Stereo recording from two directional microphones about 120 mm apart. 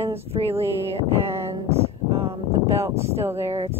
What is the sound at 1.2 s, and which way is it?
Speech, 20° right (ahead or behind).